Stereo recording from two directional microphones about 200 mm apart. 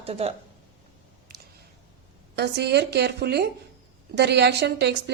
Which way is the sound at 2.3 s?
55° right (ahead or behind).